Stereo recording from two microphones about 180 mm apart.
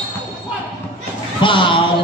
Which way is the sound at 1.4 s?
30° left (ahead or behind).